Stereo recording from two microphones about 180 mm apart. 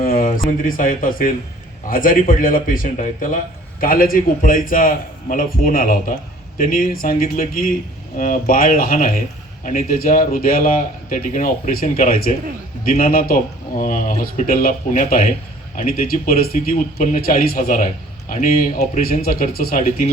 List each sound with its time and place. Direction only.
0.0 s speech: 50° left (ahead or behind)